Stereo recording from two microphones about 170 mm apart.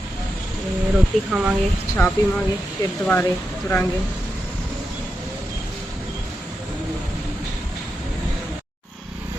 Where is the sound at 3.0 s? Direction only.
10° left (ahead or behind).